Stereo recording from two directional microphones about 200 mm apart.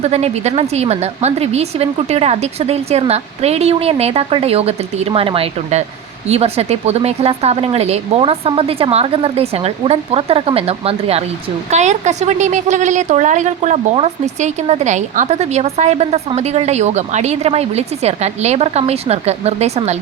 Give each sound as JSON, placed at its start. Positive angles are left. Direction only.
{"t": 0.0, "sound": "a woman's voice", "side_deg": -35}